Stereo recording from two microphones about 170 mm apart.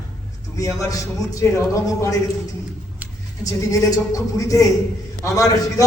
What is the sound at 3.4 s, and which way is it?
A man's voice, 20° left (ahead or behind).